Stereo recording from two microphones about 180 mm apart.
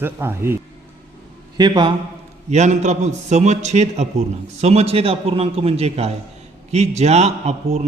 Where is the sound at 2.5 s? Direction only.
40° right (ahead or behind).